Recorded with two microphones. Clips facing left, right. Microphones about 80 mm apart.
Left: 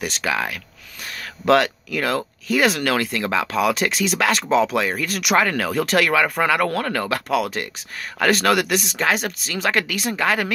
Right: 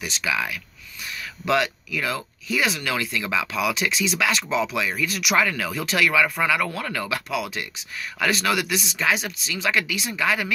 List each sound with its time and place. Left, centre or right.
0.0 s speech: left